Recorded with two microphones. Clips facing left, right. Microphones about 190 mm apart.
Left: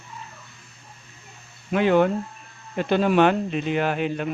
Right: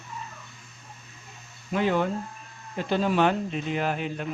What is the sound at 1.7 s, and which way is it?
Speech, 70° left (ahead or behind).